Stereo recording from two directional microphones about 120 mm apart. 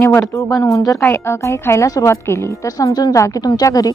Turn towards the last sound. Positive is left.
turn(degrees=30)  # may be behind; listen again after turning